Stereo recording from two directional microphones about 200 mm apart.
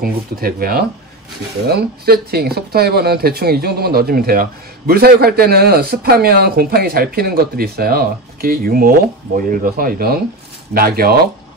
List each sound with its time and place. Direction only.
0.0 s speech: 45° right (ahead or behind)